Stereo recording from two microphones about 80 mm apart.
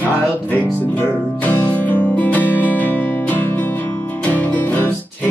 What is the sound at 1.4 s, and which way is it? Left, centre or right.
Music, centre.